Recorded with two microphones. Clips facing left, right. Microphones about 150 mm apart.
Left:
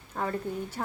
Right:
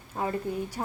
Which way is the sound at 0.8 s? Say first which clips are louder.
Even; 20° right (ahead or behind).